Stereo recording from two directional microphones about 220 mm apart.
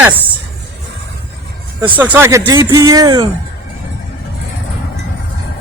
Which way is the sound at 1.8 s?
5° right (ahead or behind).